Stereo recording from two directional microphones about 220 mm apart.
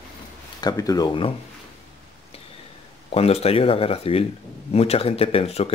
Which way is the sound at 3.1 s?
25° left (ahead or behind).